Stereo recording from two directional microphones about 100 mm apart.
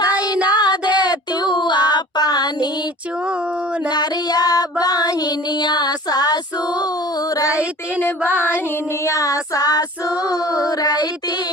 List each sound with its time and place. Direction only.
0.1 s child singing: 15° right (ahead or behind)
0.6 s female singing: 45° left (ahead or behind)
1.6 s child singing: 45° left (ahead or behind)
3.8 s child singing: 45° left (ahead or behind)
7.5 s child singing: 15° right (ahead or behind)
8.4 s music: 20° left (ahead or behind)
9.0 s child singing: 35° left (ahead or behind)